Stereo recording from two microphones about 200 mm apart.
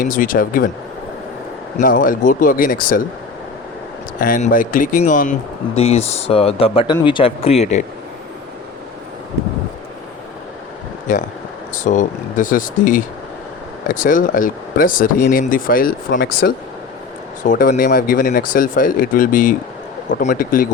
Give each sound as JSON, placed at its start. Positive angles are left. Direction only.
{"t": 0.0, "sound": "speech", "side_deg": 45}
{"t": 1.8, "sound": "speech", "side_deg": 45}
{"t": 4.2, "sound": "speech", "side_deg": 40}
{"t": 11.1, "sound": "speech", "side_deg": 40}